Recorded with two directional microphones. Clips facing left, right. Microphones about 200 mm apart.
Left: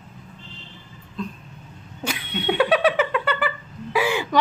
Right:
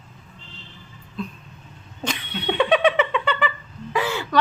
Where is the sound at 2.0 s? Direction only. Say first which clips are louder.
Left 1 dB; 5° left (ahead or behind).